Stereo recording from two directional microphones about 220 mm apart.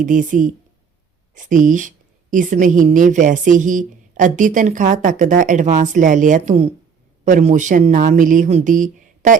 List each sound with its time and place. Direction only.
0.0 s a woman's voice: 35° right (ahead or behind)